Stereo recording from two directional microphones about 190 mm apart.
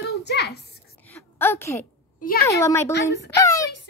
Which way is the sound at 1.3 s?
10° left (ahead or behind).